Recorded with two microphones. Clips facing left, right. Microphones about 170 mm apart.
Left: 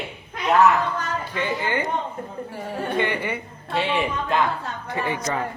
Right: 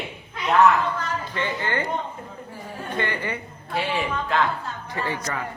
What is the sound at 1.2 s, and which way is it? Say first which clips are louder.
Speech: left 2 dB; 10° left (ahead or behind).